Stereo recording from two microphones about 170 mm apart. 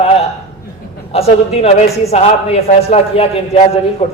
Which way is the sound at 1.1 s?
35° left (ahead or behind).